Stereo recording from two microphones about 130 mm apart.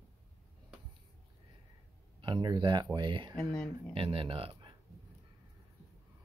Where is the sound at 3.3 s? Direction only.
5° left (ahead or behind).